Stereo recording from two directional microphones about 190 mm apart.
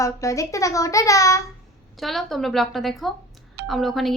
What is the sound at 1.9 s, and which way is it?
A woman's voice, centre (ahead or behind).